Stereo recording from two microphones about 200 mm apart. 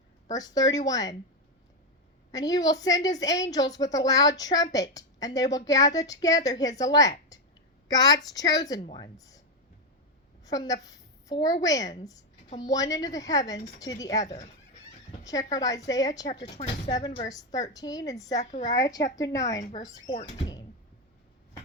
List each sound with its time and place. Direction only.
0.3 s a woman's voice: 20° left (ahead or behind)
2.3 s a woman's voice: 20° left (ahead or behind)
10.4 s a woman's voice: 20° left (ahead or behind)
20.1 s speech: 35° left (ahead or behind)